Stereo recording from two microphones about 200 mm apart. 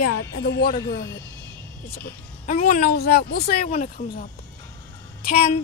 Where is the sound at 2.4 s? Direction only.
40° left (ahead or behind).